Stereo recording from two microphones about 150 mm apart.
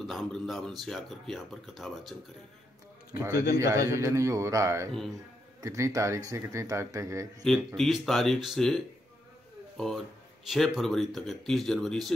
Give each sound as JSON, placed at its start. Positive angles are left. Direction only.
{"t": 0.0, "sound": "speech", "side_deg": 0}
{"t": 3.2, "sound": "a man's voice", "side_deg": -20}
{"t": 7.4, "sound": "speech", "side_deg": 0}